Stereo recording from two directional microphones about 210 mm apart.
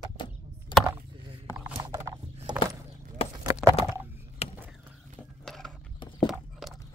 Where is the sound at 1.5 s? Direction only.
15° right (ahead or behind).